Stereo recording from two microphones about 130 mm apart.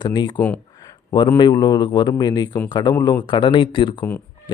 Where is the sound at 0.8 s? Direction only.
30° left (ahead or behind).